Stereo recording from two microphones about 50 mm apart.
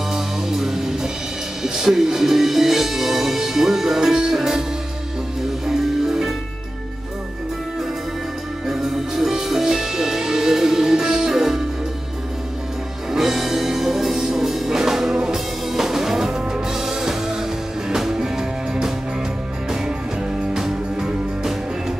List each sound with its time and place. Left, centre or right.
0.1 s music: centre
1.6 s speech: centre
5.7 s music: centre
8.6 s music: centre
13.1 s music: centre
20.5 s music: centre